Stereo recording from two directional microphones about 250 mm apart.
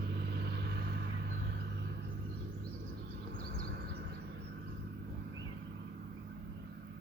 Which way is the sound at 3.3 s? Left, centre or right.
Right.